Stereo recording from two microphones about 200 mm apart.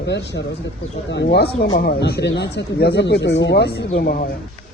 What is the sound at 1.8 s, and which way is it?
Speech, 50° left (ahead or behind).